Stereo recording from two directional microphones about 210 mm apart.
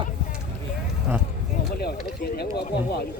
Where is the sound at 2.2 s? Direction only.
50° left (ahead or behind).